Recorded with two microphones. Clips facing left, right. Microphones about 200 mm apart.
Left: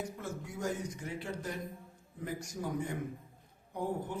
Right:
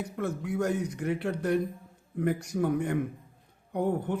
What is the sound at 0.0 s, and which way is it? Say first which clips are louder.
Speech: right 8 dB; 65° right (ahead or behind).